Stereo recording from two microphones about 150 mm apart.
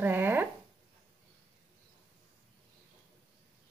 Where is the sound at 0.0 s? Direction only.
15° right (ahead or behind).